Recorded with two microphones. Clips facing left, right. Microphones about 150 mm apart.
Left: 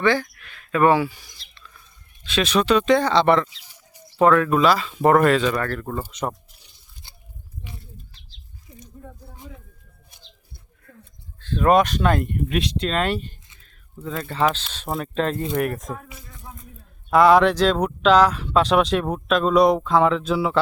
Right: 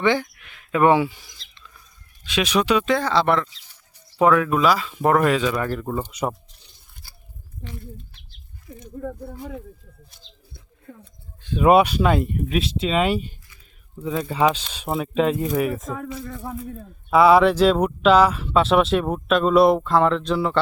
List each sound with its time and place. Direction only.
0.0 s a sound: 20° right (ahead or behind)
2.2 s speech: 10° right (ahead or behind)
7.0 s a sound: 20° left (ahead or behind)
7.8 s bird: 55° right (ahead or behind)
9.0 s speech: 70° right (ahead or behind)
11.3 s speech: 10° right (ahead or behind)
17.1 s speech: 5° right (ahead or behind)